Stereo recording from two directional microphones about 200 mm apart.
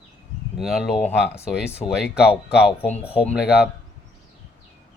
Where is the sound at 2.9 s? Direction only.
30° left (ahead or behind).